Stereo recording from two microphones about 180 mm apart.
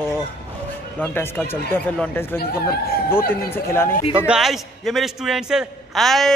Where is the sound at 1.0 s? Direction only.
15° left (ahead or behind).